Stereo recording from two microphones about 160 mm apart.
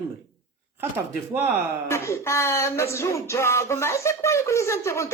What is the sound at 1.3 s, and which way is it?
Speech, 15° right (ahead or behind).